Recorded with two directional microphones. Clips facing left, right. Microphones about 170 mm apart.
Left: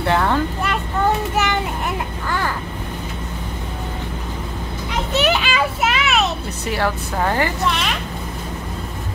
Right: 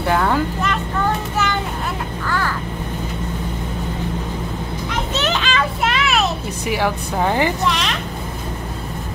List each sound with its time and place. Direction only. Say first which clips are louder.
0.0 s speech: even; 5° right (ahead or behind)
1.3 s child singing: left 1 dB; 15° left (ahead or behind)
5.1 s children playing: left 3 dB; 15° left (ahead or behind)
6.6 s speech: right 1 dB; 10° right (ahead or behind)
7.6 s speech: right 1 dB; 5° left (ahead or behind)